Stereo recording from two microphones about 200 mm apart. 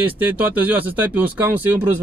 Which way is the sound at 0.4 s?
10° right (ahead or behind).